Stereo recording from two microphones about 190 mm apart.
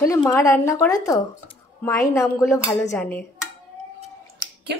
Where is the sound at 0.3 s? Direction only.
15° left (ahead or behind).